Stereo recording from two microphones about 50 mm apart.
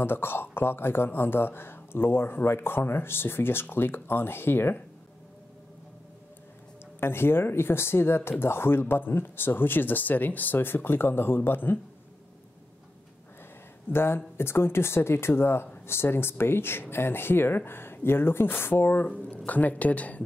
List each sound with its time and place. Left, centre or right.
0.0 s speech: left
7.0 s speech: left
13.9 s speech: left